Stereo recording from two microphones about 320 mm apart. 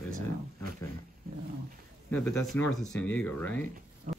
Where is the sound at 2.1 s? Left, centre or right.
Centre.